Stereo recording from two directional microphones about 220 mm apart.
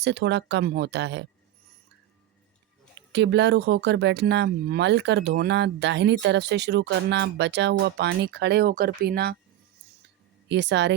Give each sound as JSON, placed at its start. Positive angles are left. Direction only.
{"t": 0.0, "sound": "speech", "side_deg": -50}
{"t": 3.1, "sound": "speech", "side_deg": -50}
{"t": 10.5, "sound": "speech", "side_deg": -55}